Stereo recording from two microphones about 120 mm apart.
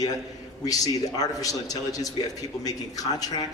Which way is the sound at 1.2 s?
30° left (ahead or behind).